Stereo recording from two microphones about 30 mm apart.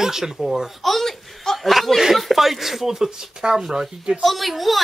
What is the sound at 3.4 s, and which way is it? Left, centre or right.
Speech, right.